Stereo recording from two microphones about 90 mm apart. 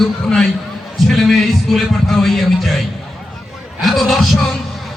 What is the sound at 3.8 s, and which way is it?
Speech, centre (ahead or behind).